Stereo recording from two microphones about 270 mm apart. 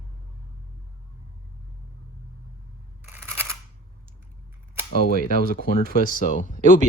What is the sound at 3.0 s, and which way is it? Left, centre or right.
Camera, centre.